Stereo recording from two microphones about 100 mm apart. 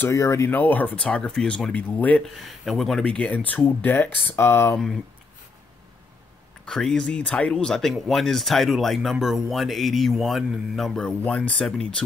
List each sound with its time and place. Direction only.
0.1 s speech: 30° left (ahead or behind)
0.5 s speech: 15° left (ahead or behind)
2.2 s speech: centre (ahead or behind)
3.0 s speech: 10° left (ahead or behind)
6.6 s speech: 5° left (ahead or behind)